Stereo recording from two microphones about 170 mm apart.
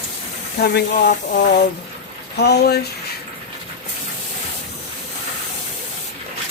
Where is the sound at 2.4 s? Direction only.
75° left (ahead or behind).